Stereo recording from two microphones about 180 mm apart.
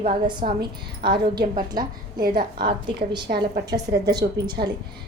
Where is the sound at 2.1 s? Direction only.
55° right (ahead or behind).